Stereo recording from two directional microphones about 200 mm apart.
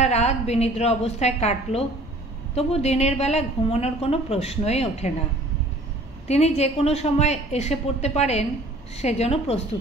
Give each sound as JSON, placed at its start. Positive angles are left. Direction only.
{"t": 0.0, "sound": "a woman's voice", "side_deg": 35}
{"t": 6.2, "sound": "a woman's voice", "side_deg": 35}